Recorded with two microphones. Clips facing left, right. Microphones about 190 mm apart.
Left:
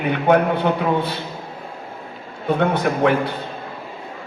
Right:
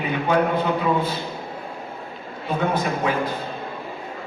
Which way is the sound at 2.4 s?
65° left (ahead or behind).